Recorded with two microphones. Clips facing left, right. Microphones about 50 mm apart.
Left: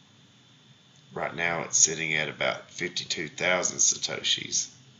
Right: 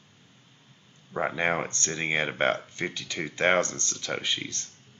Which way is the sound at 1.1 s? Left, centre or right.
Right.